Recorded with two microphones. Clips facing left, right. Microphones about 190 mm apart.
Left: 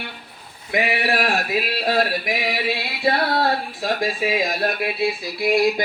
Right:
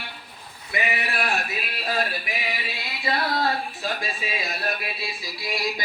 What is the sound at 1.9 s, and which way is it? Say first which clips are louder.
Singing: left 6 dB; 75° left (ahead or behind).